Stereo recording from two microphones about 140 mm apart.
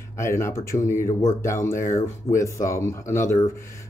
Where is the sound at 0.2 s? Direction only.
20° left (ahead or behind).